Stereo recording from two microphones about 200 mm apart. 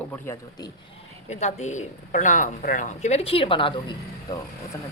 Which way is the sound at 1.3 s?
35° left (ahead or behind).